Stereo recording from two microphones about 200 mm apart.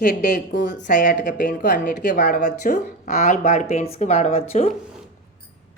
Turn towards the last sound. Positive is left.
turn(degrees=30)  # may be behind; listen again after turning